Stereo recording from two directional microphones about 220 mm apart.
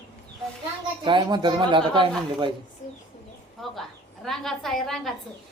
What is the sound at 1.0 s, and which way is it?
Speech, 20° right (ahead or behind).